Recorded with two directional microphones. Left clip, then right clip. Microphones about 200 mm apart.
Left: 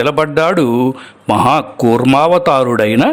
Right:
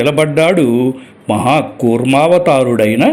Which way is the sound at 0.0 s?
35° left (ahead or behind).